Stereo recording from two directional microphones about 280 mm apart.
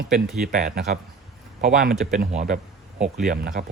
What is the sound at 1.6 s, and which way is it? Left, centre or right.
Speech, right.